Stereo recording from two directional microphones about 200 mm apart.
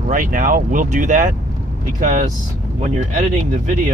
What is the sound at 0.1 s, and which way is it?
Speech, 40° right (ahead or behind).